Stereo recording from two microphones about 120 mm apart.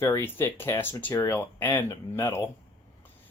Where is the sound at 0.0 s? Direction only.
20° left (ahead or behind).